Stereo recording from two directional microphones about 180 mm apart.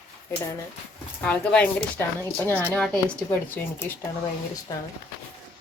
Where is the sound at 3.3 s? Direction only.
10° left (ahead or behind).